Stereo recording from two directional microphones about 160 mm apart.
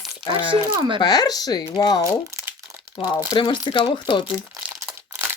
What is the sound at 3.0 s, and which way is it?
Speech, 25° left (ahead or behind).